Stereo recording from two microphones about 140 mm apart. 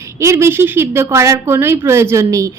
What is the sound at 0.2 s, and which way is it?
A woman's voice, 20° right (ahead or behind).